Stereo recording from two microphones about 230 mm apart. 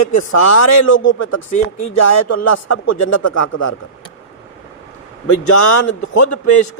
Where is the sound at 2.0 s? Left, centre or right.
Left.